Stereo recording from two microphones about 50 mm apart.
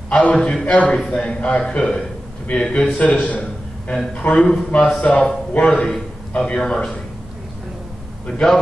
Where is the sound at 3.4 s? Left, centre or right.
Centre.